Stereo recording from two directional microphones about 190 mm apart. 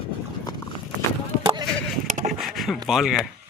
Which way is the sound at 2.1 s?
40° right (ahead or behind).